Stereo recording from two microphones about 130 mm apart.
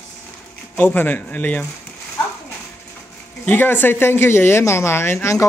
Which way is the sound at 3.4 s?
15° left (ahead or behind).